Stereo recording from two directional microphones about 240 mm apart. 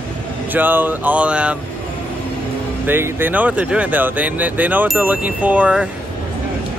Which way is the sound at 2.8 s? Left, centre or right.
Centre.